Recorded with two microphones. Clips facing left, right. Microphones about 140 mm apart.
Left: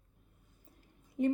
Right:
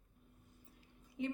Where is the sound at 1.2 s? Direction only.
50° left (ahead or behind).